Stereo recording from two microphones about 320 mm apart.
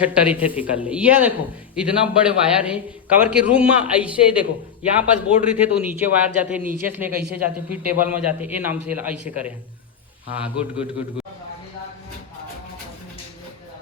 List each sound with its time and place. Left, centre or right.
0.0 s a man's voice: centre